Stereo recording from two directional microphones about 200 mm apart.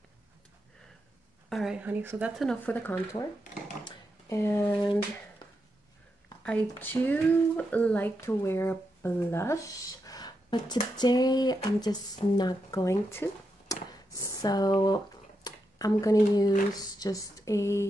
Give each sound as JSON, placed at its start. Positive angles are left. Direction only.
{"t": 1.5, "sound": "speech", "side_deg": 0}
{"t": 3.8, "sound": "a sound", "side_deg": 15}
{"t": 6.8, "sound": "speech", "side_deg": 10}